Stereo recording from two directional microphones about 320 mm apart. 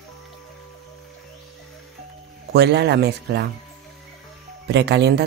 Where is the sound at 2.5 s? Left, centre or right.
Right.